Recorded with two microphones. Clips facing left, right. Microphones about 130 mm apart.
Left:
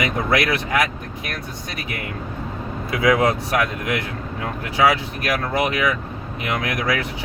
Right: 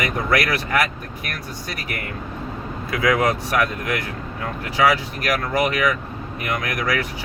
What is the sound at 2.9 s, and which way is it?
Speech, 25° left (ahead or behind).